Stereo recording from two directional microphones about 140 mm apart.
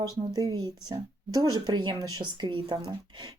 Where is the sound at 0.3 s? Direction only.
30° right (ahead or behind).